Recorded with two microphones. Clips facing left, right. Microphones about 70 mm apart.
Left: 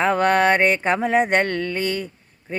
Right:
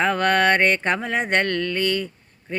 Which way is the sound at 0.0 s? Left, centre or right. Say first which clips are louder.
Left 2 dB; centre.